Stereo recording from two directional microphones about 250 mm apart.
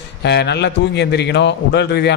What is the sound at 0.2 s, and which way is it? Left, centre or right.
A man's voice, left.